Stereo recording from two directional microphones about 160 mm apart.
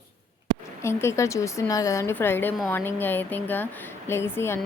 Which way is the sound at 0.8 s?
15° left (ahead or behind).